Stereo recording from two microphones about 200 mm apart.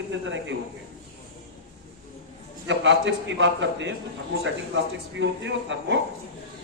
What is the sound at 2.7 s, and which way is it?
A man's voice, 65° right (ahead or behind).